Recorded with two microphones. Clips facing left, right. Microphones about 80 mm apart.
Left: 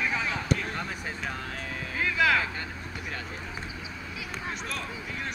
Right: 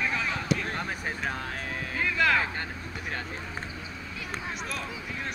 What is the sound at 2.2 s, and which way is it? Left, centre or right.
Vehicle, centre.